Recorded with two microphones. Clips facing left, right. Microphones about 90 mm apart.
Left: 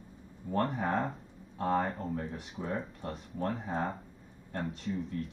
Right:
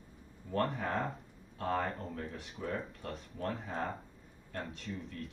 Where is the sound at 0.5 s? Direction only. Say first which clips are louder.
Left 3 dB; 30° left (ahead or behind).